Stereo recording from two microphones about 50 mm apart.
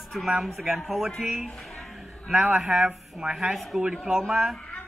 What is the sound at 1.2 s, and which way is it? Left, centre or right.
Speech, centre.